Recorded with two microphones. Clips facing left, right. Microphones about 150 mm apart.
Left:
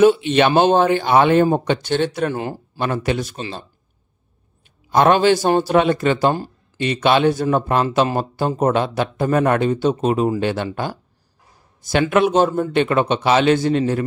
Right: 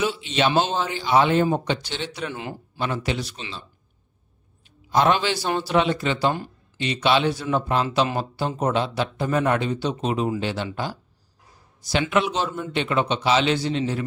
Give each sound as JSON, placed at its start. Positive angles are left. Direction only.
{"t": 0.0, "sound": "a man's voice", "side_deg": 55}
{"t": 2.8, "sound": "speech", "side_deg": 50}
{"t": 4.9, "sound": "speech", "side_deg": 50}